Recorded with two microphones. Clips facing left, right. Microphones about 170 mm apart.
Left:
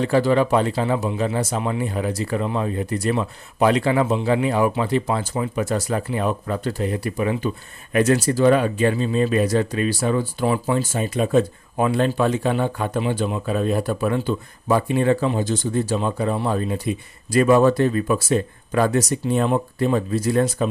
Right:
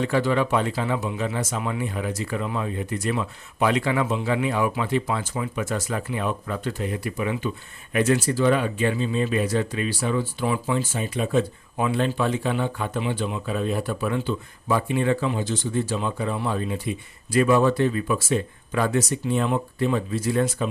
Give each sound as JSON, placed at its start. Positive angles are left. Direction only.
{"t": 0.0, "sound": "speech", "side_deg": 35}